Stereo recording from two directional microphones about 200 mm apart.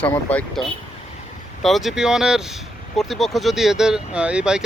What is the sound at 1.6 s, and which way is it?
Speech, centre (ahead or behind).